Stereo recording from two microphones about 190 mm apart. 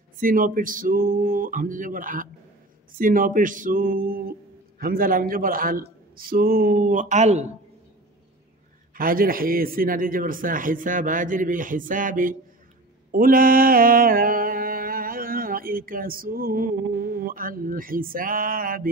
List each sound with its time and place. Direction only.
0.2 s speech: 45° right (ahead or behind)
8.9 s speech: 50° right (ahead or behind)
13.1 s mantra: 50° right (ahead or behind)